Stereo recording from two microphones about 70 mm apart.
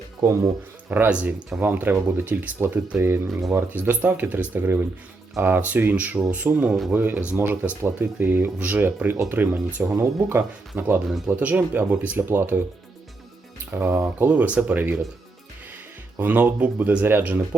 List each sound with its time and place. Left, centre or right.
0.9 s speech: right
1.1 s speech: centre
13.7 s speech: right
16.1 s speech: right